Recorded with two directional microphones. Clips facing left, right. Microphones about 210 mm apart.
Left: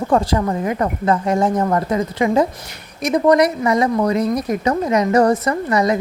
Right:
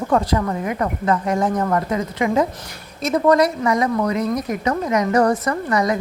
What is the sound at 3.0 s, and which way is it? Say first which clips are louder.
Speech: left 2 dB; 15° left (ahead or behind).